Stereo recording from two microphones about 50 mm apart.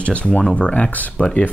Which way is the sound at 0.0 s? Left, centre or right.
Left.